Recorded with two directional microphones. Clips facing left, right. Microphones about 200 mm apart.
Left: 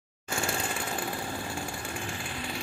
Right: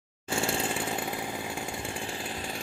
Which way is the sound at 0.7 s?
15° right (ahead or behind).